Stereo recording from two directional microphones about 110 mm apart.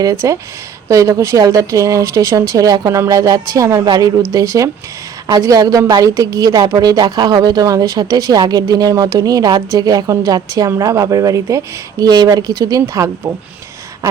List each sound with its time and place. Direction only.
0.0 s a woman's voice: 30° right (ahead or behind)